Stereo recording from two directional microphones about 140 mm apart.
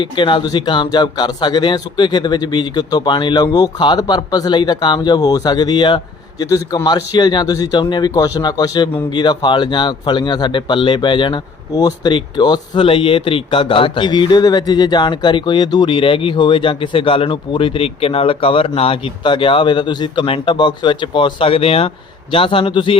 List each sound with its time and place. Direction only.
0.0 s a man's voice: 35° left (ahead or behind)